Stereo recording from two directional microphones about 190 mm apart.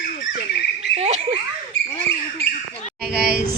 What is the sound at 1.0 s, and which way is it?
Speech, 30° right (ahead or behind).